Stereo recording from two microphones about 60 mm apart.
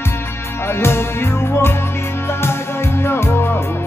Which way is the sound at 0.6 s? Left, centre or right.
Left.